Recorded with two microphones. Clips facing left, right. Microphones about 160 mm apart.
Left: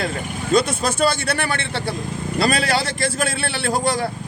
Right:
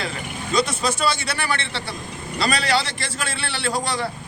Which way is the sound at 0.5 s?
55° left (ahead or behind).